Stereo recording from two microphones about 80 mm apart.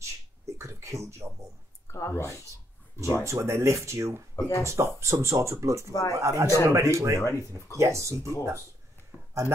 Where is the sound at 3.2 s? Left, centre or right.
Right.